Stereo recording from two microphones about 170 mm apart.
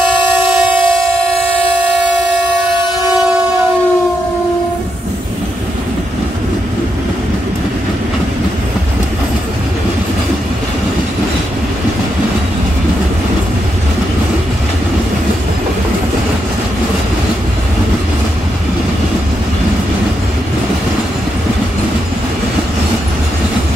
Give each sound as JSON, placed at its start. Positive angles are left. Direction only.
{"t": 0.2, "sound": "train", "side_deg": 30}